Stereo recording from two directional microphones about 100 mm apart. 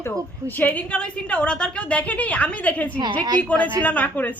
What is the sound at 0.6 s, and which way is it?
A woman's voice, 15° left (ahead or behind).